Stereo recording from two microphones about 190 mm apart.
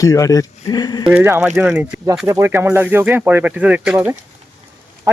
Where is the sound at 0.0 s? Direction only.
15° left (ahead or behind).